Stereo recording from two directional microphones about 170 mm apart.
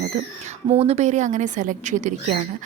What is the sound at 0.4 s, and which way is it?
A woman's voice, 40° right (ahead or behind).